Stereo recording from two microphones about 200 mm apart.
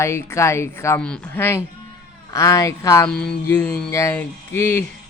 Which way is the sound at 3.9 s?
15° left (ahead or behind).